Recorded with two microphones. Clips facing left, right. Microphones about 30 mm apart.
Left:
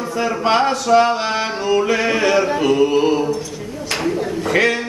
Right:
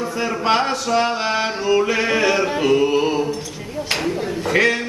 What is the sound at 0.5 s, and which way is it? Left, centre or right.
Music, centre.